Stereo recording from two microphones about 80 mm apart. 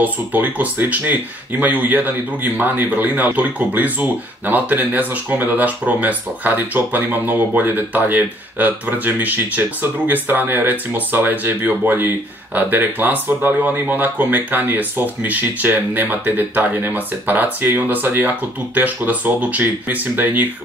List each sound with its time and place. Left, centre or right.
0.0 s speech: right